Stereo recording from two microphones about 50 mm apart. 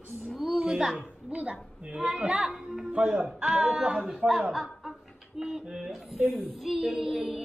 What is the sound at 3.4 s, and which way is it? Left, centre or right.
Music, centre.